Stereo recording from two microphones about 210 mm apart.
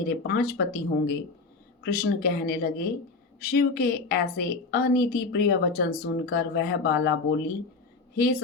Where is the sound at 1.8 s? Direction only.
45° left (ahead or behind).